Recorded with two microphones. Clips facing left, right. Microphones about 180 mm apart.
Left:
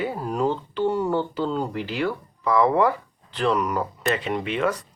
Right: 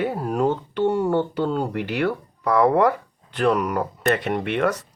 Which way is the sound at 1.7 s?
65° right (ahead or behind).